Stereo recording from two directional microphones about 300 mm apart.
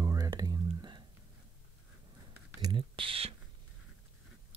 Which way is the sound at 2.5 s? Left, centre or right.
Centre.